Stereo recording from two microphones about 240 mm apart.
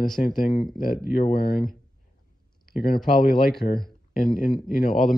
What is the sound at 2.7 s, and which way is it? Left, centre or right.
Speech, left.